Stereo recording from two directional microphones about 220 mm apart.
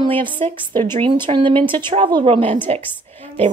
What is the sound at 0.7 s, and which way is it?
Speech, 10° left (ahead or behind).